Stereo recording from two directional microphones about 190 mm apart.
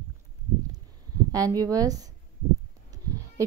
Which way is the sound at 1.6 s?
20° right (ahead or behind).